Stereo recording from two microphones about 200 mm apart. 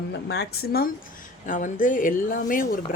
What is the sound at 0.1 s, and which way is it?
Speech, 55° left (ahead or behind).